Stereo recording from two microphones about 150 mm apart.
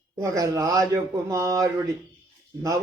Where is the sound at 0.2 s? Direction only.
20° right (ahead or behind).